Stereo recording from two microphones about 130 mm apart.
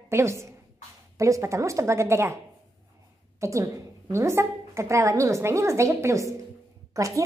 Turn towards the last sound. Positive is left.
turn(degrees=-25)  # may be behind; listen again after turning